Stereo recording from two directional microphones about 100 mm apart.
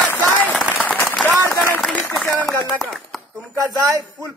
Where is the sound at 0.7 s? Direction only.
15° left (ahead or behind).